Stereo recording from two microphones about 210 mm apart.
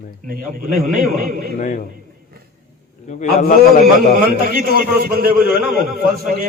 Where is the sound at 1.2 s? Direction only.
45° right (ahead or behind).